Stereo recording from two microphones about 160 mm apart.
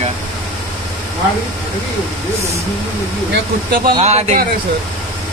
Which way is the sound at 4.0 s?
45° right (ahead or behind).